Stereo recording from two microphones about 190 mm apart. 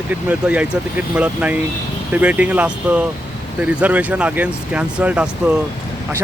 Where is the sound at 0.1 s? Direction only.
10° right (ahead or behind).